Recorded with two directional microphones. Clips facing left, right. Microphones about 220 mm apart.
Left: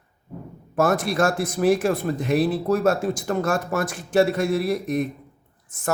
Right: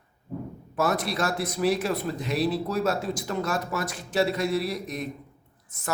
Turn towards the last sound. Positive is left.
turn(degrees=50)  # may be behind; listen again after turning